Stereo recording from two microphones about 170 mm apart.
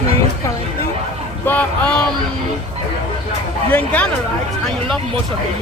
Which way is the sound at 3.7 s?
10° left (ahead or behind).